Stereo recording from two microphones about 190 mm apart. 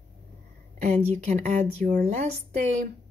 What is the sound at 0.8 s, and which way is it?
A woman's voice, 40° right (ahead or behind).